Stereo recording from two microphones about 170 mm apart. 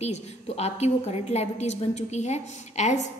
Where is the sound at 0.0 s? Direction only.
40° left (ahead or behind).